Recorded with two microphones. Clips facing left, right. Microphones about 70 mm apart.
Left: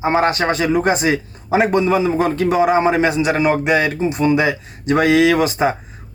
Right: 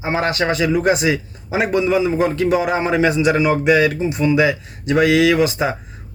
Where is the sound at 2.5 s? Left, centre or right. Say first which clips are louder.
Left 3 dB; left.